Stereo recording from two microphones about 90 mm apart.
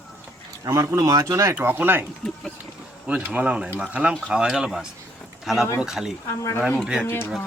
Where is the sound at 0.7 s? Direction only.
40° right (ahead or behind).